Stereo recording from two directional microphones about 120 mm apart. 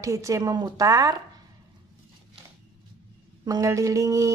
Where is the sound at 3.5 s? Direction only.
25° right (ahead or behind).